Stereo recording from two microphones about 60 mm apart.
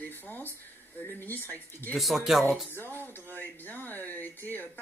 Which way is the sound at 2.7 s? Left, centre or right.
Left.